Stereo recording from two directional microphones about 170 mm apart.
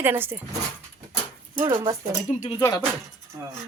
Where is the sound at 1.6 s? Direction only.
20° right (ahead or behind).